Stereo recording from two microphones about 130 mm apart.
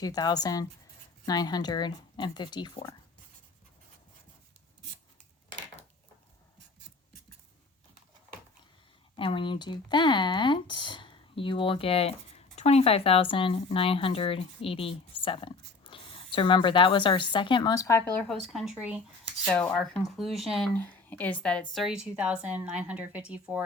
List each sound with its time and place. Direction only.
0.0 s speech: 30° left (ahead or behind)
9.1 s speech: 40° left (ahead or behind); by 18.0 s 25° left (ahead or behind)
18.1 s speech: 15° left (ahead or behind)
18.4 s speech: 5° right (ahead or behind)
19.5 s speech: 10° left (ahead or behind)
20.7 s a woman's voice: 15° left (ahead or behind); by 23.6 s 10° right (ahead or behind)